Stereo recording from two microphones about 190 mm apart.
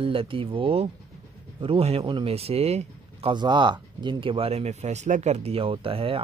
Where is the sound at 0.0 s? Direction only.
30° right (ahead or behind).